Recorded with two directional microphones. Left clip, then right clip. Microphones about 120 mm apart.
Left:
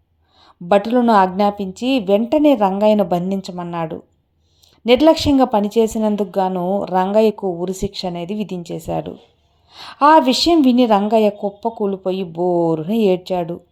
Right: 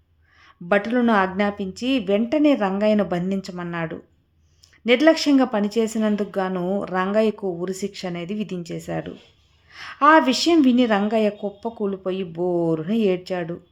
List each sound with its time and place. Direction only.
0.4 s a woman's voice: 25° left (ahead or behind)